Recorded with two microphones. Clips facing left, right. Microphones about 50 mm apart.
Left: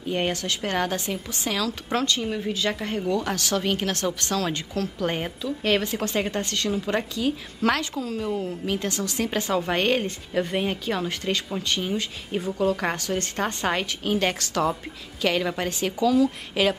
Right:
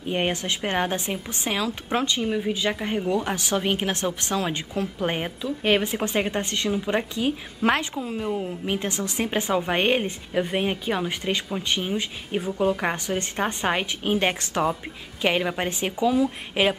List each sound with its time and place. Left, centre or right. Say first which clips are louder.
0.1 s a woman's voice: right 1 dB; right